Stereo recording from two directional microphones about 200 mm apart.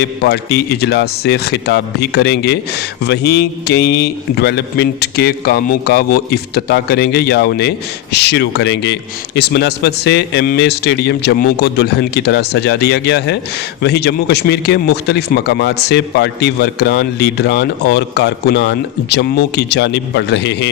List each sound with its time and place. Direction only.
0.0 s a man's voice: 55° left (ahead or behind)